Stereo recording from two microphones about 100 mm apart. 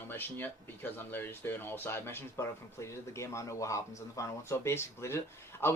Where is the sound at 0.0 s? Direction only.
20° left (ahead or behind).